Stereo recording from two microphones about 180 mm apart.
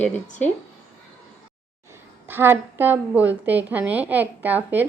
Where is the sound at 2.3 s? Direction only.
10° right (ahead or behind).